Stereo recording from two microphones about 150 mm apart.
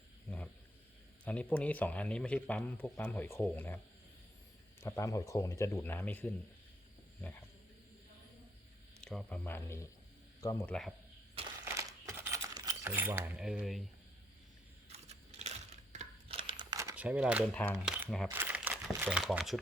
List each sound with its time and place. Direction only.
0.3 s a sound: 10° left (ahead or behind)
1.2 s speech: 10° left (ahead or behind)
4.8 s speech: 20° left (ahead or behind)
9.0 s speech: 5° left (ahead or behind); by 10.7 s 20° left (ahead or behind)
10.7 s speech: 5° left (ahead or behind)
11.6 s coin: 20° right (ahead or behind); by 13.8 s centre (ahead or behind)
14.9 s a sound: 45° right (ahead or behind)
16.4 s crumpling: 35° right (ahead or behind)
17.0 s speech: 10° right (ahead or behind)
17.5 s speech: 10° left (ahead or behind)
17.8 s speech: 5° right (ahead or behind)
18.3 s speech: 15° right (ahead or behind)